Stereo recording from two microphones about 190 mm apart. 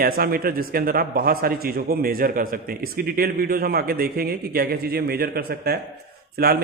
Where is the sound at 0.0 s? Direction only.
50° right (ahead or behind).